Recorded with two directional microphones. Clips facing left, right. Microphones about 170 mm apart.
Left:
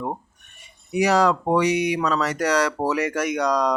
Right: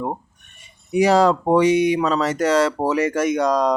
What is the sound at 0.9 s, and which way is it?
Speech, 25° right (ahead or behind).